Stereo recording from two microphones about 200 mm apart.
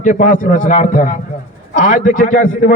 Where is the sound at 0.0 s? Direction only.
40° left (ahead or behind).